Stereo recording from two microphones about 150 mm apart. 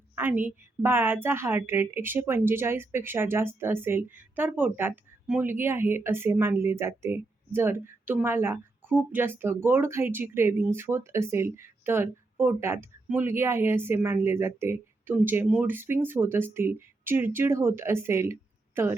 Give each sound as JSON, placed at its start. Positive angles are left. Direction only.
{"t": 0.2, "sound": "a woman's voice", "side_deg": -15}